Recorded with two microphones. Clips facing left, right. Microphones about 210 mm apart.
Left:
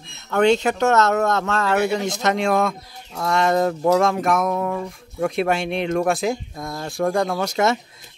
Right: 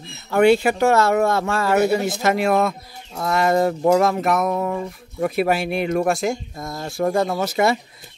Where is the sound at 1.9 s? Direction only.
5° right (ahead or behind).